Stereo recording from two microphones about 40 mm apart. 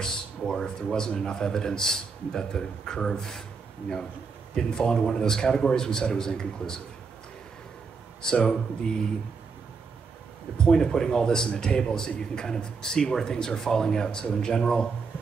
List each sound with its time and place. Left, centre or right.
0.5 s a man's voice: centre
4.6 s a man's voice: centre
8.2 s a man's voice: centre
10.6 s a man's voice: centre